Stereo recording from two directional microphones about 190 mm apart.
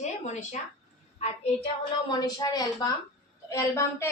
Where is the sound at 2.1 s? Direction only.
20° left (ahead or behind).